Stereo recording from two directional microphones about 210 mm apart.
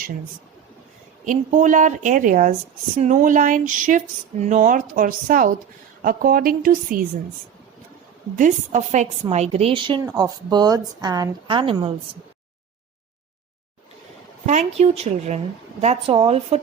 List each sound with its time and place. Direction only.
1.2 s speech: 35° right (ahead or behind)
8.4 s a woman's voice: 35° right (ahead or behind)
14.4 s a woman's voice: 30° right (ahead or behind)